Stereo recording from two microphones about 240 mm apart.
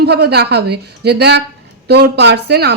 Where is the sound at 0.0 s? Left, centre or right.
Right.